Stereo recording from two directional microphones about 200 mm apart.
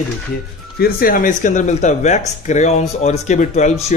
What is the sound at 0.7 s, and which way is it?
Speech, 50° left (ahead or behind).